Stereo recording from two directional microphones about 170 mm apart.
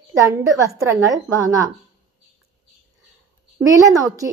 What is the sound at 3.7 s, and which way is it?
Speech, 20° right (ahead or behind).